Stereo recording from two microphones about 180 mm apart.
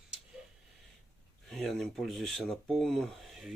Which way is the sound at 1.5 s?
Centre (ahead or behind).